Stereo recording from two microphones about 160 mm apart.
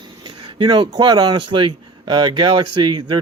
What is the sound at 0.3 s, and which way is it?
Speech, 30° right (ahead or behind).